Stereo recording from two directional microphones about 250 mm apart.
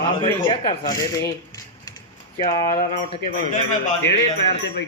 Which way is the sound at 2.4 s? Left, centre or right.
Centre.